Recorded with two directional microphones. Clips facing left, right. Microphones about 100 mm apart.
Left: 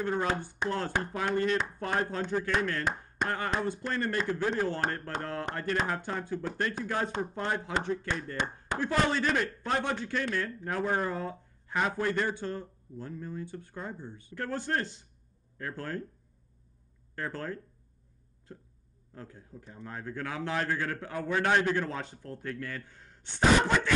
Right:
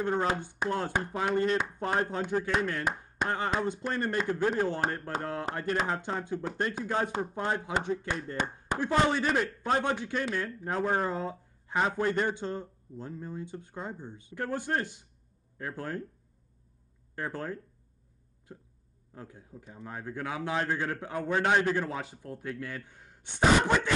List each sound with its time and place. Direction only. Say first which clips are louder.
0.3 s speech: right 1 dB; 15° right (ahead or behind)
17.1 s speech: right 1 dB; 15° right (ahead or behind)